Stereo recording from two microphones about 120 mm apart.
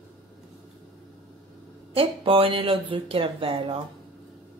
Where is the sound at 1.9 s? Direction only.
50° right (ahead or behind).